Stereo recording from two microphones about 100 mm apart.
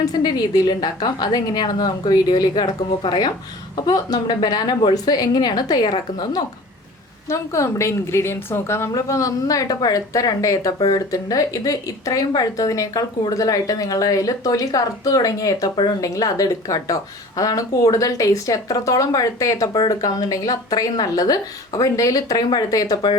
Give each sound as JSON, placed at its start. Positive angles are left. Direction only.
{"t": 0.0, "sound": "a woman's voice", "side_deg": 45}
{"t": 7.3, "sound": "a woman's voice", "side_deg": 30}
{"t": 15.7, "sound": "a woman's voice", "side_deg": 50}
{"t": 16.0, "sound": "a woman's voice", "side_deg": 35}